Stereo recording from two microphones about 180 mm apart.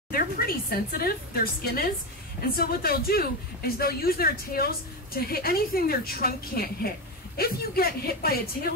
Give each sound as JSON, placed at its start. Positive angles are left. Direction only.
{"t": 0.1, "sound": "speech", "side_deg": 55}